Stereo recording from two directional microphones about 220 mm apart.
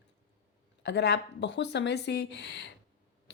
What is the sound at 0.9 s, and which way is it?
Speech, 50° left (ahead or behind).